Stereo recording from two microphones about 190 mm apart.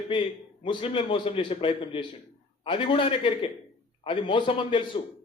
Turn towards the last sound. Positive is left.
turn(degrees=25)  # may be behind; listen again after turning